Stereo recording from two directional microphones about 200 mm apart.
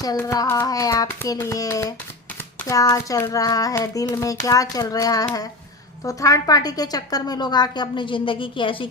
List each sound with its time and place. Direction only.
0.0 s child singing: 15° left (ahead or behind)
6.1 s a woman's voice: 15° left (ahead or behind)